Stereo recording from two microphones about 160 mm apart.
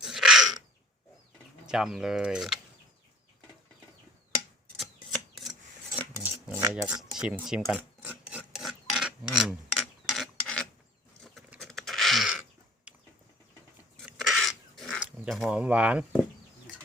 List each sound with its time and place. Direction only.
0.0 s a sound: 5° right (ahead or behind)
1.6 s speech: 5° right (ahead or behind)
4.8 s filing: centre (ahead or behind)
6.1 s cutlery: 15° right (ahead or behind)
7.2 s filing: 5° right (ahead or behind)
11.2 s a sound: centre (ahead or behind)